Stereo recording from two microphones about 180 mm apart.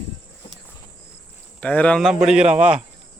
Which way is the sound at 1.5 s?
5° left (ahead or behind).